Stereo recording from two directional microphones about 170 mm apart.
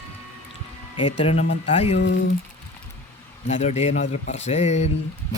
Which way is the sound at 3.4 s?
40° left (ahead or behind).